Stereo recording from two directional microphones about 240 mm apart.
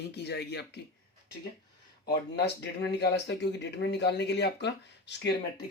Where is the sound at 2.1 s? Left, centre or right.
Left.